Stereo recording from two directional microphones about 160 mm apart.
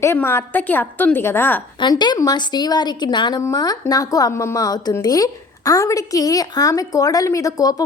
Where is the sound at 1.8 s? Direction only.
25° left (ahead or behind).